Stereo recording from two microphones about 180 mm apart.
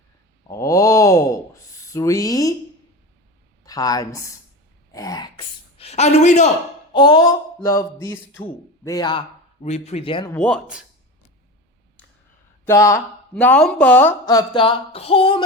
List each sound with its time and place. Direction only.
0.4 s groan: 20° left (ahead or behind)
1.9 s a sound: 20° left (ahead or behind)
3.6 s speech: 20° left (ahead or behind); by 6.5 s 40° left (ahead or behind)
6.9 s a man's voice: 25° left (ahead or behind)
9.6 s speech: 40° left (ahead or behind)
10.3 s a man's voice: 5° left (ahead or behind)
12.6 s a man's voice: 15° left (ahead or behind)
14.3 s a sound: 25° left (ahead or behind)